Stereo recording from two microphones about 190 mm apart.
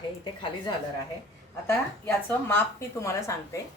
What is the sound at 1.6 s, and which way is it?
A woman's voice, 10° left (ahead or behind).